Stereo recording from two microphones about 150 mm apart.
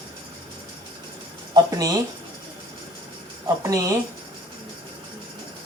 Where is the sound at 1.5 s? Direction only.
25° right (ahead or behind).